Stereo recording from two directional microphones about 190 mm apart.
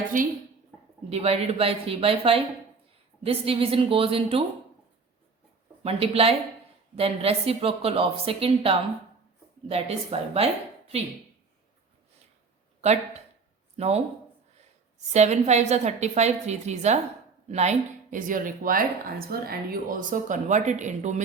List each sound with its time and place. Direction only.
1.1 s a woman's voice: 35° right (ahead or behind)
5.8 s speech: 30° right (ahead or behind)
12.8 s speech: 35° right (ahead or behind)
15.1 s a woman's voice: 35° right (ahead or behind)